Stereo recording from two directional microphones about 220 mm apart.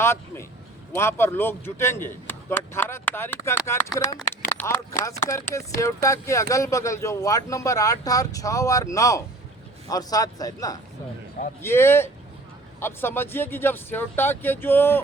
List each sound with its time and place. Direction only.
0.0 s a man's voice: 10° left (ahead or behind)